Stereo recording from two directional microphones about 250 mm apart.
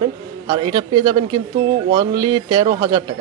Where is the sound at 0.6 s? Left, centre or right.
Centre.